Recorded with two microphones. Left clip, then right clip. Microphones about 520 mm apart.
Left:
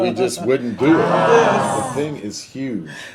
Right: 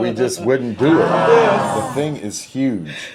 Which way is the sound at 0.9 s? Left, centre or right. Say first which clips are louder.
Right 1 dB; centre.